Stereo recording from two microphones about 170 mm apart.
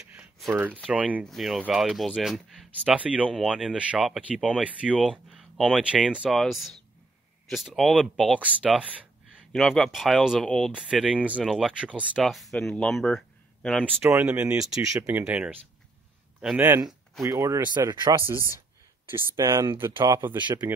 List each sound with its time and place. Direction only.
0.1 s a sound: 5° right (ahead or behind)
0.5 s speech: 10° right (ahead or behind); by 13.9 s 5° left (ahead or behind)
13.9 s speech: 15° right (ahead or behind)
14.8 s speech: 20° right (ahead or behind)